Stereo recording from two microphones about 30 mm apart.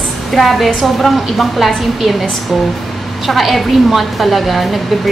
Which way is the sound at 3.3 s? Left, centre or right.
Centre.